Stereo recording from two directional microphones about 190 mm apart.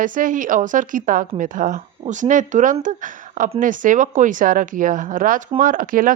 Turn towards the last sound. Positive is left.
turn(degrees=-45)  # may be behind; listen again after turning